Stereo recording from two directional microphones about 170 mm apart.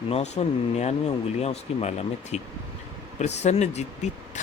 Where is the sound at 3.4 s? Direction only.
40° left (ahead or behind).